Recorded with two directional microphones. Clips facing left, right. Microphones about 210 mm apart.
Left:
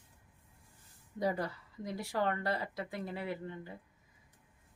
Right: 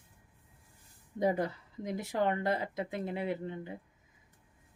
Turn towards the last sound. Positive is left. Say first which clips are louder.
# right 4 dB
turn(degrees=-20)  # may be behind; listen again after turning